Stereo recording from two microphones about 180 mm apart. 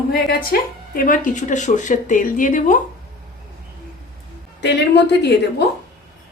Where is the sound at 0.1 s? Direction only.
55° left (ahead or behind).